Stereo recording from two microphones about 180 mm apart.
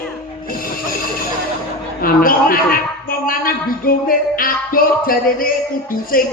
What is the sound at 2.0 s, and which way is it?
A man's voice, 55° left (ahead or behind).